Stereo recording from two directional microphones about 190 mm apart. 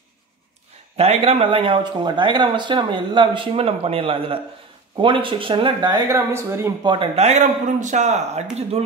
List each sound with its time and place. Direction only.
0.9 s speech: 30° right (ahead or behind); by 6.9 s 15° right (ahead or behind)
6.9 s speech: 30° right (ahead or behind)